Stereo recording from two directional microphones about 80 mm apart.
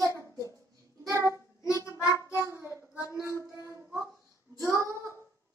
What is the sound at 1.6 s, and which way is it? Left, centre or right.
Child singing, left.